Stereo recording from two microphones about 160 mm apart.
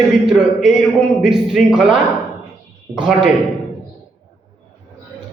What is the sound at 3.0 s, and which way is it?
Speech, 5° right (ahead or behind).